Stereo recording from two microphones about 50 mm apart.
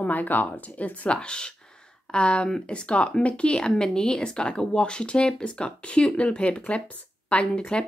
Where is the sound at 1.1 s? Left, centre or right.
Centre.